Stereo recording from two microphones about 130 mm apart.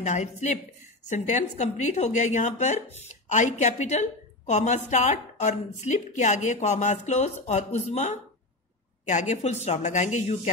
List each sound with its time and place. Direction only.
0.0 s a woman's voice: 65° left (ahead or behind)